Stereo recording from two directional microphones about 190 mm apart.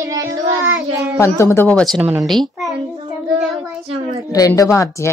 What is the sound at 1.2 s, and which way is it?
Speech, 15° left (ahead or behind).